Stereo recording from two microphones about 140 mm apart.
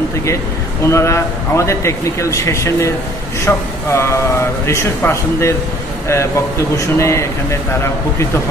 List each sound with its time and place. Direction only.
0.8 s a man's voice: 20° left (ahead or behind)